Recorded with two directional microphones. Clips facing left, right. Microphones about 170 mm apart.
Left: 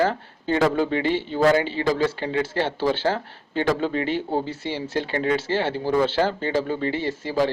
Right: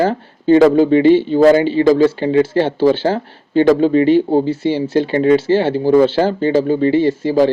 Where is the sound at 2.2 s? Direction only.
25° right (ahead or behind).